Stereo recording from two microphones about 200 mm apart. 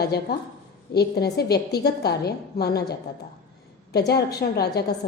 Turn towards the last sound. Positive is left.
turn(degrees=50)  # may be behind; listen again after turning